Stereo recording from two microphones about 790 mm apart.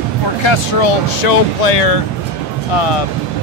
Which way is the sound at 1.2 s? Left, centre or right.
Left.